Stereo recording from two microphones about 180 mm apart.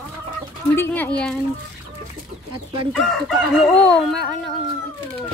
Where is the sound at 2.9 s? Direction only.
Centre (ahead or behind).